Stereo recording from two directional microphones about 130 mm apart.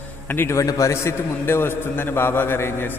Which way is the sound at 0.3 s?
20° left (ahead or behind).